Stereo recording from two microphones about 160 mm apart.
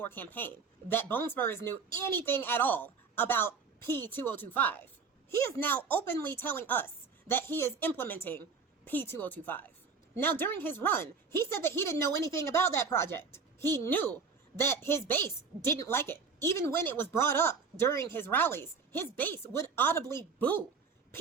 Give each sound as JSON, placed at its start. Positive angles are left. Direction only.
{"t": 0.0, "sound": "a woman's voice", "side_deg": 10}